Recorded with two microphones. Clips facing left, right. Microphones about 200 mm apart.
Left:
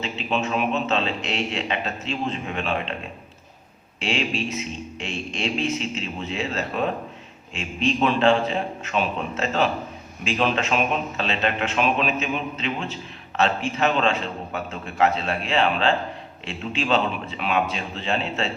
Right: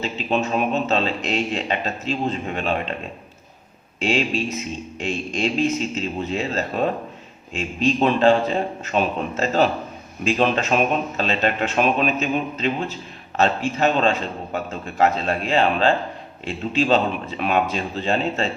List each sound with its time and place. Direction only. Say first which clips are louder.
0.0 s a man's voice: right 3 dB; 40° right (ahead or behind)
4.0 s a man's voice: right 4 dB; 40° right (ahead or behind)
7.9 s a man's voice: right 2 dB; 35° right (ahead or behind)